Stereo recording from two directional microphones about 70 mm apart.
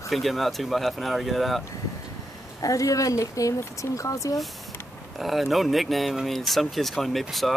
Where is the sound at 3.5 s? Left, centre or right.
Left.